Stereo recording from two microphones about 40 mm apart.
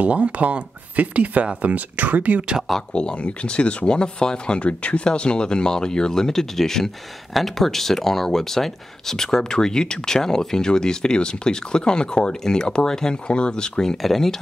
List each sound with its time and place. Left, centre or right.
0.0 s speech: right
2.9 s speech: left; by 14.3 s centre